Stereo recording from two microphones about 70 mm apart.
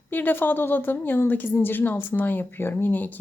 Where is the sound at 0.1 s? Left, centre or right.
Left.